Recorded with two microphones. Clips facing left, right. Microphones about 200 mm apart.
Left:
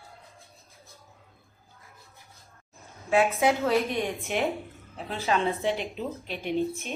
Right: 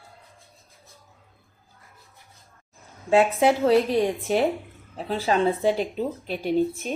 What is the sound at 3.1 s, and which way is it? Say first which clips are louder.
Speech: right 4 dB; 30° right (ahead or behind).